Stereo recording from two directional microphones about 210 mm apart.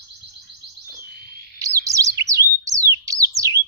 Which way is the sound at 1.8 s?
15° right (ahead or behind).